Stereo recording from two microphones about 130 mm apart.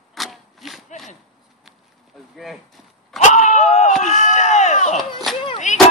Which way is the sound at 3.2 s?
70° left (ahead or behind).